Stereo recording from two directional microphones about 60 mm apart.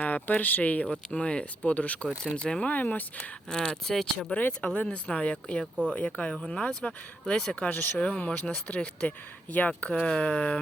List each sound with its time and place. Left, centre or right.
0.0 s speech: left
3.5 s speech: centre
6.3 s speech: centre
6.6 s speech: centre